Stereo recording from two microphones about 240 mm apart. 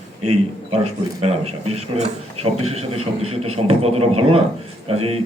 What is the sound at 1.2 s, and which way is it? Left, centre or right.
A man's voice, right.